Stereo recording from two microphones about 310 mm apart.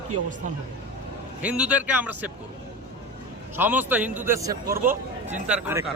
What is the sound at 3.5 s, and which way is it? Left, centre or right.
Speech, centre.